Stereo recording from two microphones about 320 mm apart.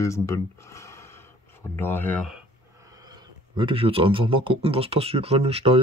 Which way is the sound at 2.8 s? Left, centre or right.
Centre.